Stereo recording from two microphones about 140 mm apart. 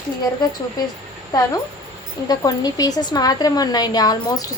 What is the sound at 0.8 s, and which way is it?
Speech, 25° left (ahead or behind).